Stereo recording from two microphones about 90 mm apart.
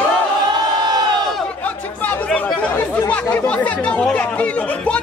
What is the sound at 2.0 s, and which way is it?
Chatter, 15° left (ahead or behind).